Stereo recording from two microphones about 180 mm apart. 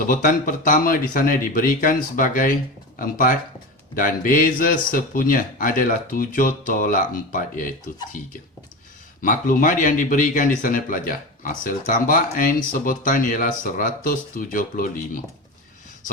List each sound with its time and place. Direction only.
0.0 s speech: 50° left (ahead or behind)
9.2 s speech: 50° left (ahead or behind)